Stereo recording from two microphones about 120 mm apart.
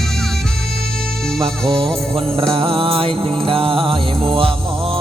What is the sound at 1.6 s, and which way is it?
Mantra, 50° right (ahead or behind).